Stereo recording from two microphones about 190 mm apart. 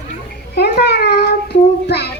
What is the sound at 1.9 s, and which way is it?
Child singing, 60° left (ahead or behind).